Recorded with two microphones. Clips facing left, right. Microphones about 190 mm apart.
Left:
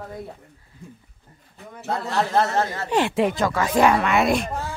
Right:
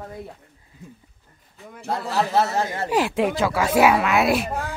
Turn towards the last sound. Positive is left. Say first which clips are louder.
# even
turn(degrees=-5)  # may be behind; listen again after turning